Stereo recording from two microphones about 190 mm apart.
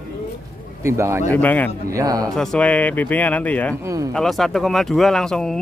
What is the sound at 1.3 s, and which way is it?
Speech, 10° left (ahead or behind).